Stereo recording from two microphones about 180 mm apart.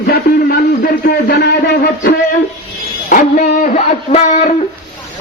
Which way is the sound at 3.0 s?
45° left (ahead or behind).